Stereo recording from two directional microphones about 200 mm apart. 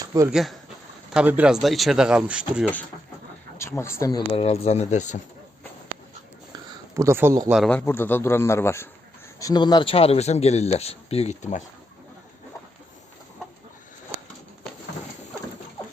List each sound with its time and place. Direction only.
0.3 s speech: centre (ahead or behind)
3.6 s speech: 15° left (ahead or behind)
4.3 s speech: 30° left (ahead or behind)
6.5 s a sound: 15° right (ahead or behind)
7.5 s speech: 5° left (ahead or behind); by 11.6 s 35° left (ahead or behind)